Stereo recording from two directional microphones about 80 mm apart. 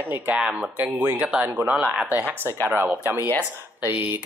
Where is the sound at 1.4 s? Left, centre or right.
Right.